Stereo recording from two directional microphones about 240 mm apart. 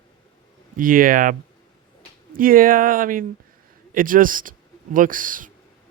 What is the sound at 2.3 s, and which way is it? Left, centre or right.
Speech, right.